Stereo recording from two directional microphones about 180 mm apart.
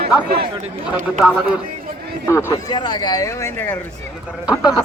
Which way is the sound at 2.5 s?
20° left (ahead or behind).